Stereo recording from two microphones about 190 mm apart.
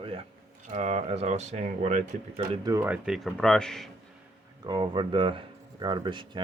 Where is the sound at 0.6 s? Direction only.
40° right (ahead or behind).